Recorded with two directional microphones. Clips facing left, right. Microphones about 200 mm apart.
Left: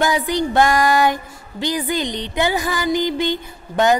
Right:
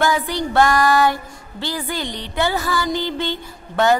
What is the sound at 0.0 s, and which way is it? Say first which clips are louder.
Female singing: left 1 dB; 20° left (ahead or behind).